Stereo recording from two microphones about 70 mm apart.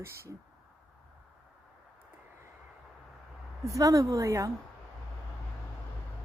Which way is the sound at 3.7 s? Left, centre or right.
Right.